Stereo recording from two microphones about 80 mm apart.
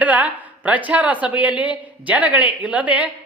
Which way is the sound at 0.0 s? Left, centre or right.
Centre.